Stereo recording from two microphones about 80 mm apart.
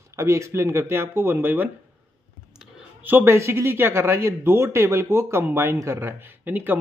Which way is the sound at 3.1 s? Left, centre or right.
Right.